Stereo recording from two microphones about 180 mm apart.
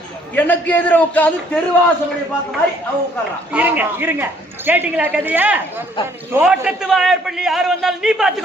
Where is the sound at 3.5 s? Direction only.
10° right (ahead or behind).